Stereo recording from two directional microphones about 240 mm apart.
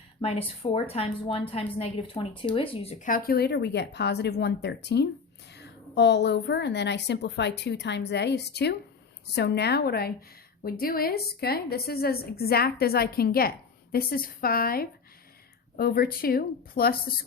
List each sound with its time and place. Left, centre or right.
0.2 s a woman's voice: left